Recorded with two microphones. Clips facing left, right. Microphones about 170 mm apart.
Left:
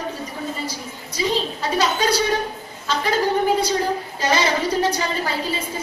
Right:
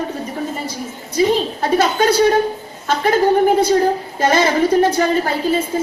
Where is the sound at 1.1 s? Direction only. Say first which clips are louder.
Right 7 dB; 55° right (ahead or behind).